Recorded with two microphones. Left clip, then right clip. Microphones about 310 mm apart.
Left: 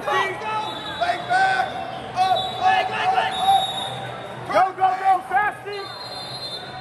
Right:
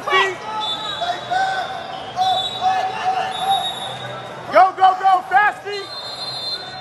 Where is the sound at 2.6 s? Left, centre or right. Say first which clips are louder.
Left 1 dB; centre.